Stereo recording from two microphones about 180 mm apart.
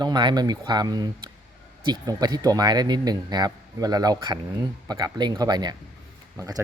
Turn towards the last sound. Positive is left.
turn(degrees=-20)  # may be behind; listen again after turning